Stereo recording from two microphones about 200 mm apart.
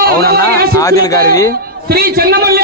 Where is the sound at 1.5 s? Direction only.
50° right (ahead or behind).